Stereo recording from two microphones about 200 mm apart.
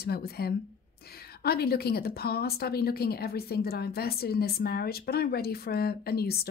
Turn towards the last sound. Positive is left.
turn(degrees=50)  # may be behind; listen again after turning